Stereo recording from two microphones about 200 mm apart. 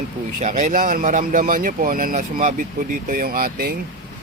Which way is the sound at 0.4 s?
40° right (ahead or behind).